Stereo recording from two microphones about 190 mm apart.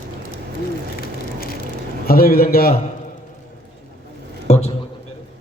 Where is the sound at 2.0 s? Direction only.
50° left (ahead or behind).